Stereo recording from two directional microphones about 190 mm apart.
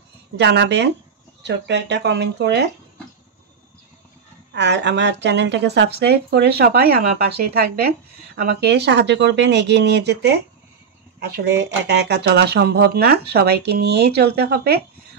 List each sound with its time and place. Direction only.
0.4 s speech: 65° right (ahead or behind)
4.6 s speech: 65° right (ahead or behind)